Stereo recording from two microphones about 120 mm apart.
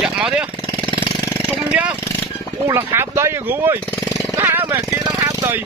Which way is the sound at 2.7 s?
20° right (ahead or behind).